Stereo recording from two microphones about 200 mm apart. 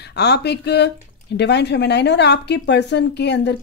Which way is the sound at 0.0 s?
55° left (ahead or behind).